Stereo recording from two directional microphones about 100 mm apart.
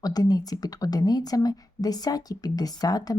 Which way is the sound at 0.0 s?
40° left (ahead or behind).